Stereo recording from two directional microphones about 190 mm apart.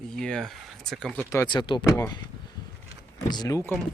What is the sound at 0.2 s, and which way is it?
Speech, 5° left (ahead or behind).